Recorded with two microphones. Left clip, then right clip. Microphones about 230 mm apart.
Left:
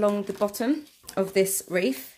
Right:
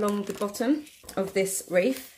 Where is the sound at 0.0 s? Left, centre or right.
Left.